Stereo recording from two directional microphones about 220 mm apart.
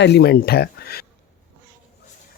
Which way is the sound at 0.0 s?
45° left (ahead or behind).